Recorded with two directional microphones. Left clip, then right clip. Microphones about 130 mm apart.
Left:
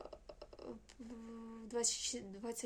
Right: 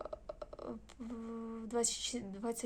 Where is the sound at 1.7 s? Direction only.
15° left (ahead or behind).